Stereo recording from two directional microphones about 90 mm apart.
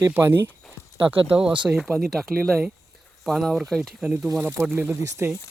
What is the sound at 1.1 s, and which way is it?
Speech, 85° right.